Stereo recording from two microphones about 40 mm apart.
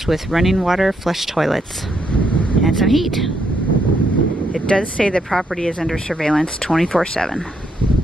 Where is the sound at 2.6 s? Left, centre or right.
Centre.